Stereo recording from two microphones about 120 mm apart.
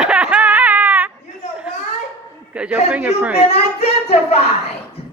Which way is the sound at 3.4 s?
55° left (ahead or behind).